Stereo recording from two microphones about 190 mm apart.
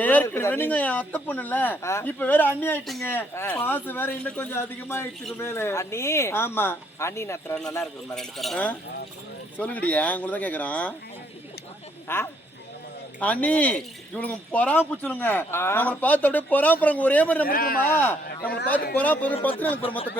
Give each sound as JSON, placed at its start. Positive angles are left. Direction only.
{"t": 0.0, "sound": "speech", "side_deg": 10}
{"t": 12.0, "sound": "speech", "side_deg": 10}
{"t": 17.4, "sound": "speech", "side_deg": 50}
{"t": 17.8, "sound": "speech", "side_deg": 10}